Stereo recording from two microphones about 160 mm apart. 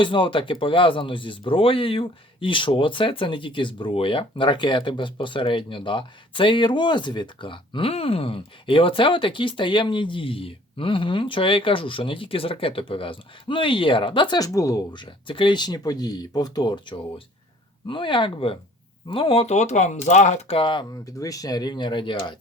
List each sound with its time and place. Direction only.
0.0 s speech: 30° left (ahead or behind)
20.9 s speech: 20° left (ahead or behind)